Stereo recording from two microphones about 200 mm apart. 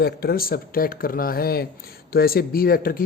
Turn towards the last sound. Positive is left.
turn(degrees=45)  # may be behind; listen again after turning